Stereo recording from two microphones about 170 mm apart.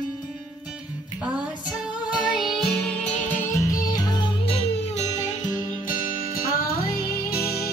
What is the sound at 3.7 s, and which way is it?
Music, 20° left (ahead or behind).